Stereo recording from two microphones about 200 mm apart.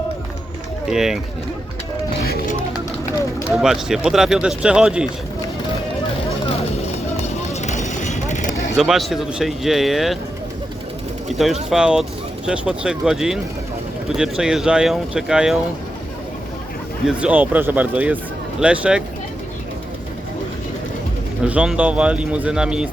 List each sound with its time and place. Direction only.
0.9 s speech: centre (ahead or behind)
3.5 s speech: centre (ahead or behind)
7.5 s vehicle: 35° left (ahead or behind)
8.7 s speech: centre (ahead or behind)
11.3 s speech: centre (ahead or behind)
17.1 s speech: 5° right (ahead or behind)
21.4 s speech: 5° right (ahead or behind)